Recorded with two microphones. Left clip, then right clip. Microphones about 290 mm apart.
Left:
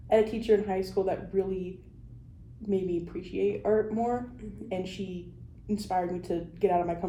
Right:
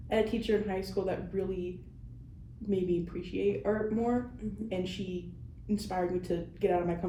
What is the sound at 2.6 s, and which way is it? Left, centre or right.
A woman's voice, centre.